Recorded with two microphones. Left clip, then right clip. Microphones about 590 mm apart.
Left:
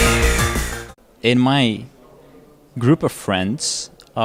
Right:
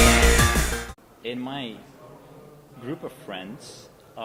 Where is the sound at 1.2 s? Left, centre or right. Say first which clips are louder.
Left 16 dB; left.